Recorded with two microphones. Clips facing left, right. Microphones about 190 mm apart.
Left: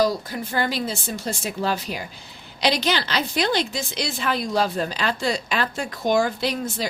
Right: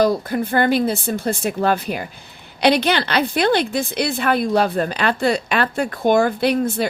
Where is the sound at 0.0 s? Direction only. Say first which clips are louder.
Right 5 dB; 60° right (ahead or behind).